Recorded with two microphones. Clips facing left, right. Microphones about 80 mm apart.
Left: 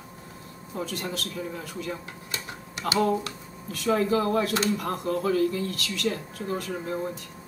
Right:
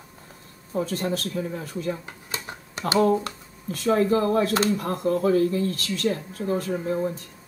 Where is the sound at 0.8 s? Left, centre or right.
Right.